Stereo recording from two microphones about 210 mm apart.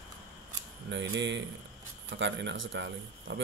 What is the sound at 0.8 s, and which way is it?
Speech, 60° right (ahead or behind).